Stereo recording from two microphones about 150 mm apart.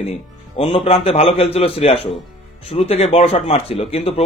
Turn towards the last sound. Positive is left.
turn(degrees=40)  # may be behind; listen again after turning